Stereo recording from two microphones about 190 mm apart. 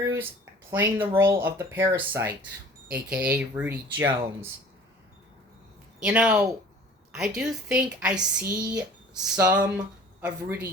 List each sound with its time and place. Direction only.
0.0 s speech: 15° right (ahead or behind)
6.0 s a woman's voice: 5° right (ahead or behind)